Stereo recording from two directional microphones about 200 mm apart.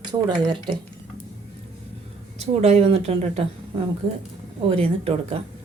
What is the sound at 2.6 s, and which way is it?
Speech, 30° right (ahead or behind).